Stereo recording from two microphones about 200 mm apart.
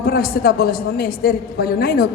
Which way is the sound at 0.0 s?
50° left (ahead or behind).